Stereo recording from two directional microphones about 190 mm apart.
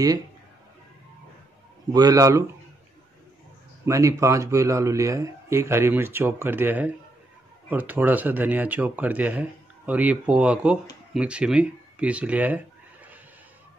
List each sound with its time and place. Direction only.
1.9 s a man's voice: 20° right (ahead or behind)
3.8 s speech: 15° right (ahead or behind)